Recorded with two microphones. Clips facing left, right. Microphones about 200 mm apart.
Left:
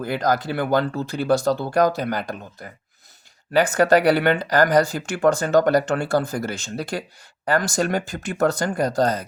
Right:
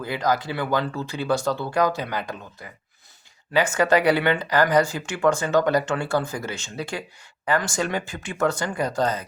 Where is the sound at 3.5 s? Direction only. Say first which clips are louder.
Left 3 dB; 35° left (ahead or behind).